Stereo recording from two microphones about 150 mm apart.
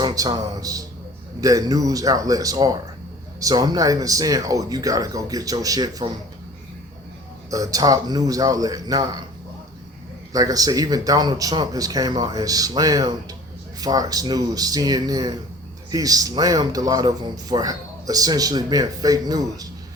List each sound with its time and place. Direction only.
0.0 s speech: 25° right (ahead or behind)
7.5 s speech: 25° right (ahead or behind)
10.3 s speech: 25° right (ahead or behind)